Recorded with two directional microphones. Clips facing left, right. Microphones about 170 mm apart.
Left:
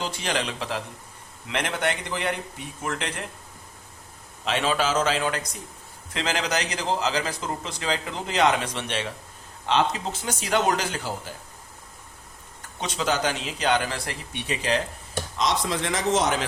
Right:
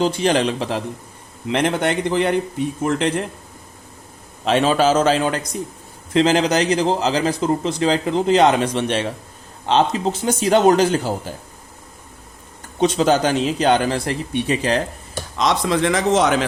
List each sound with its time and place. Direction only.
0.0 s speech: 25° right (ahead or behind)
4.4 s a man's voice: 35° right (ahead or behind)
12.8 s a man's voice: 30° right (ahead or behind)
15.4 s speech: 70° right (ahead or behind)